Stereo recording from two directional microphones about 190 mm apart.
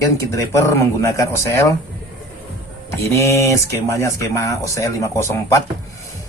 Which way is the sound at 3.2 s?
15° left (ahead or behind).